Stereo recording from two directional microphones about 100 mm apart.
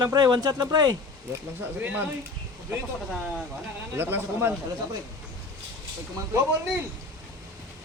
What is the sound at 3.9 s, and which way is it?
Speech, 25° right (ahead or behind).